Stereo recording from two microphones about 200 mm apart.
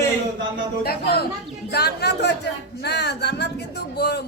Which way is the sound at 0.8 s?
50° left (ahead or behind).